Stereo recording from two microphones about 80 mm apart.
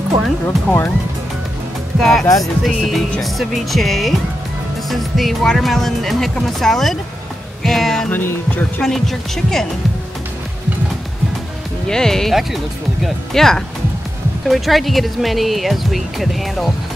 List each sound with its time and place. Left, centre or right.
0.7 s music: left
2.0 s speech: centre
8.1 s music: left
8.8 s speech: centre
11.9 s speech: centre